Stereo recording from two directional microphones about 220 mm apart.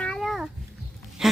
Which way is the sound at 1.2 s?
Centre (ahead or behind).